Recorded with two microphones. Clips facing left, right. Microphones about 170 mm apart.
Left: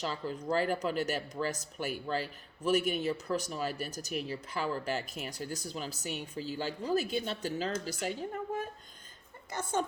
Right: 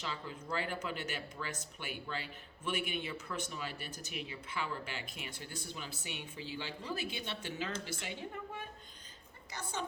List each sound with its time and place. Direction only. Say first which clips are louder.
0.0 s a woman's voice: left 7 dB; 40° left (ahead or behind)